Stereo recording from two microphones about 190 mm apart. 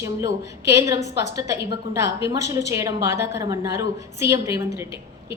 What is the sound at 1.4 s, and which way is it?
A woman's voice, 15° right (ahead or behind).